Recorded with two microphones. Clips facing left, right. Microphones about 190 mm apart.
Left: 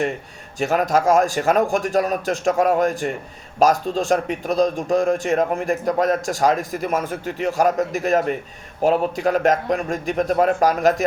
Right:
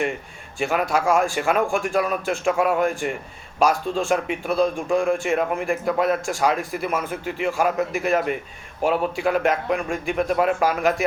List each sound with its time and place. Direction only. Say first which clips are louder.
0.6 s a man's voice: left 3 dB; 40° left (ahead or behind)